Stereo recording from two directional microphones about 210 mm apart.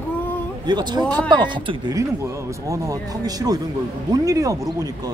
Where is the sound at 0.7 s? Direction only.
20° right (ahead or behind).